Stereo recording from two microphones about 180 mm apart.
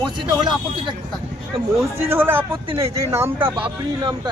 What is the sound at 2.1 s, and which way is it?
Speech, 10° right (ahead or behind).